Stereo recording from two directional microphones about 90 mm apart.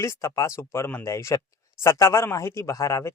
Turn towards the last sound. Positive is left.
turn(degrees=35)  # may be behind; listen again after turning